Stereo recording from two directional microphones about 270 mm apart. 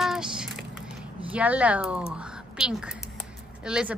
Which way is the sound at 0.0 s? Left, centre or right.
Centre.